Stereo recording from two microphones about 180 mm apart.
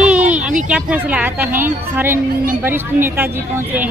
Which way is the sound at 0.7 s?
5° right (ahead or behind).